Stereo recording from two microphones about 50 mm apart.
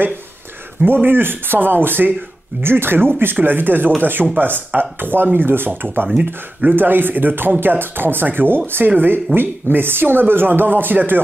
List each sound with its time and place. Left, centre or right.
1.0 s speech: right
6.0 s speech: right
6.7 s speech: right